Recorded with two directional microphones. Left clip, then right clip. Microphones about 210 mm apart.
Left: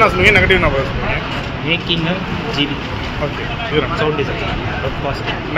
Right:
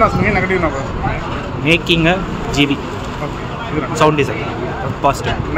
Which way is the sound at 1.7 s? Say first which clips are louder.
Right 5 dB; 55° right (ahead or behind).